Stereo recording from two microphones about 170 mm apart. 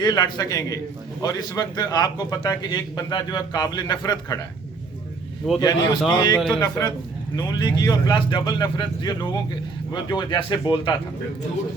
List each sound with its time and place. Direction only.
0.0 s a man's voice: 25° left (ahead or behind)
5.5 s a man's voice: 25° left (ahead or behind)